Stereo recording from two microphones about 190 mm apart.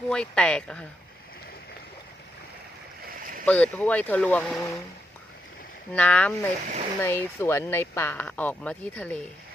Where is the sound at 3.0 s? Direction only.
45° right (ahead or behind).